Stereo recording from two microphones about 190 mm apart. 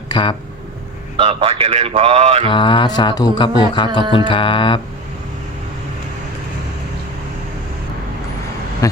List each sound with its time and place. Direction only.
0.1 s speech: 25° left (ahead or behind)
1.2 s speech: 30° right (ahead or behind)
2.5 s speech: 25° left (ahead or behind)
8.8 s speech: 20° left (ahead or behind)